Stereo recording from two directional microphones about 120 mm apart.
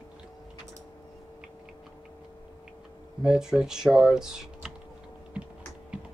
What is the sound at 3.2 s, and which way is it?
Speech, 5° right (ahead or behind).